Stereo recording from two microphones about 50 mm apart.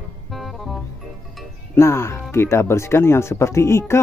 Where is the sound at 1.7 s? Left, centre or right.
Left.